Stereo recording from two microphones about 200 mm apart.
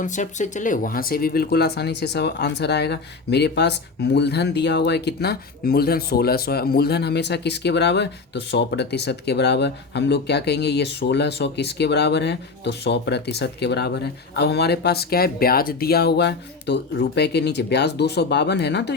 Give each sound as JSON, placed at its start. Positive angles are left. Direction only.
{"t": 0.0, "sound": "speech", "side_deg": 40}